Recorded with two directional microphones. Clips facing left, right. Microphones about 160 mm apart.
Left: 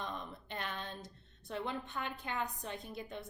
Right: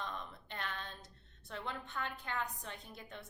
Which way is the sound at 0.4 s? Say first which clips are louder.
Left 3 dB; 15° left (ahead or behind).